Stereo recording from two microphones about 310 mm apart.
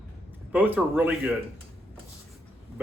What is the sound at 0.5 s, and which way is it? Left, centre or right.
Speech, centre.